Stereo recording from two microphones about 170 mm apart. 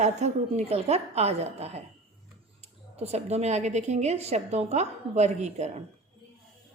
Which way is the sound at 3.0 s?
40° right (ahead or behind).